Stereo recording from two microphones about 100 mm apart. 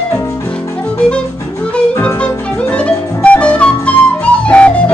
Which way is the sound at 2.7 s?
10° left (ahead or behind).